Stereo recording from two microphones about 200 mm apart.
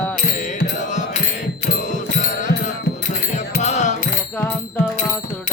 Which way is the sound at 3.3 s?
35° left (ahead or behind).